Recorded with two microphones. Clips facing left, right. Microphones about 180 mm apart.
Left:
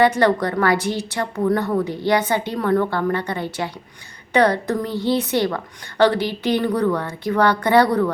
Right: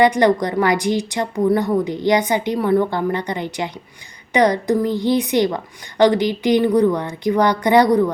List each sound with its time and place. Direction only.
0.0 s a woman's voice: 15° right (ahead or behind)